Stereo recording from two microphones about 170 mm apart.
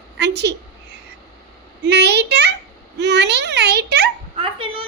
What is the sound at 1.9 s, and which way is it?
Speech, 75° right (ahead or behind).